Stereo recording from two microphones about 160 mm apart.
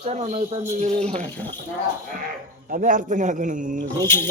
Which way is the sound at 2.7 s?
55° right (ahead or behind).